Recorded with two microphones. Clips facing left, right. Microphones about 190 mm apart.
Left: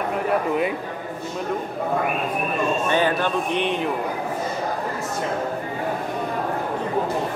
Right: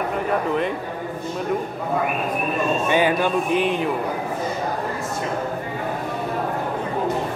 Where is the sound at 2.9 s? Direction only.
10° right (ahead or behind).